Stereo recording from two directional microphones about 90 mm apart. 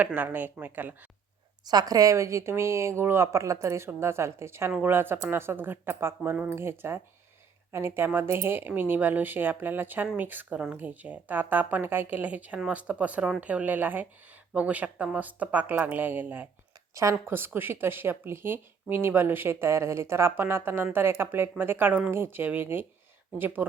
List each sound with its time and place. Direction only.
0.0 s a woman's voice: 20° right (ahead or behind)
1.6 s a woman's voice: 45° right (ahead or behind); by 6.6 s 15° right (ahead or behind)
6.6 s a woman's voice: 30° right (ahead or behind)
16.9 s a woman's voice: 35° right (ahead or behind); by 23.7 s 20° right (ahead or behind)